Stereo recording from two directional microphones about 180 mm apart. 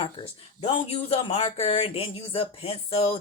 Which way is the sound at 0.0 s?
30° left (ahead or behind).